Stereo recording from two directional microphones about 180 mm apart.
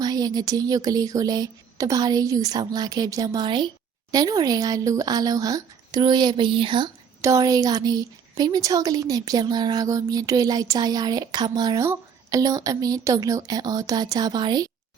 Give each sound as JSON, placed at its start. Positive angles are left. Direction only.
{"t": 0.0, "sound": "speech", "side_deg": -20}